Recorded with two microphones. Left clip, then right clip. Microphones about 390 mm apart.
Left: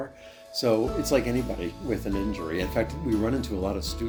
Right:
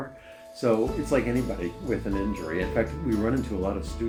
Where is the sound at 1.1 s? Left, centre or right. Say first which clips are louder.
Left 1 dB; left.